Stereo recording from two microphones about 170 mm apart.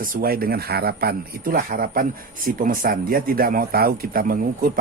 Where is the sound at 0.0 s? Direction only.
55° right (ahead or behind).